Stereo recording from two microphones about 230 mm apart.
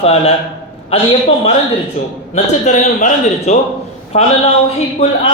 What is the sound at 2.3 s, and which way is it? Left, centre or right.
A man's voice, left.